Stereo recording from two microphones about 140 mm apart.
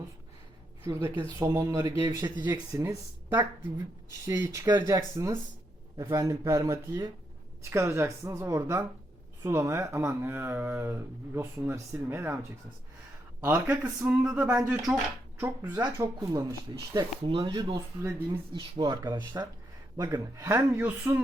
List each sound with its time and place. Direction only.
0.9 s speech: 20° right (ahead or behind)